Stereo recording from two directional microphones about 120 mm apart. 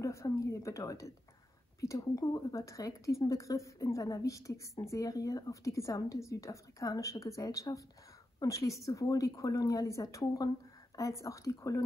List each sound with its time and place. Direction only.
0.0 s a woman's voice: 25° left (ahead or behind)